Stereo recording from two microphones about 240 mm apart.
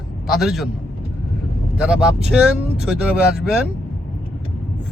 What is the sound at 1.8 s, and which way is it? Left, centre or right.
A man's voice, centre.